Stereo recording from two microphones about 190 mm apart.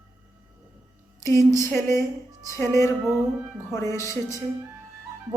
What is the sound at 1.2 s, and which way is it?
A woman's voice, 15° left (ahead or behind).